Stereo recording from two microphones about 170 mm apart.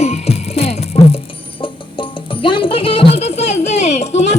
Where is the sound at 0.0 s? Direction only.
40° left (ahead or behind).